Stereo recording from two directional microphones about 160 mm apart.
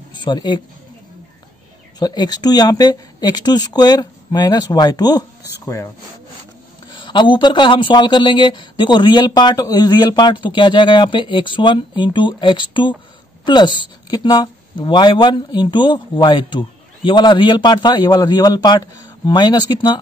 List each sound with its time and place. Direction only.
0.2 s speech: 30° left (ahead or behind)
2.0 s speech: 25° left (ahead or behind)
6.9 s speech: 30° left (ahead or behind)